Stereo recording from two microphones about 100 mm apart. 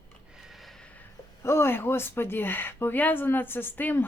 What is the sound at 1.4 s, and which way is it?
Speech, 25° left (ahead or behind).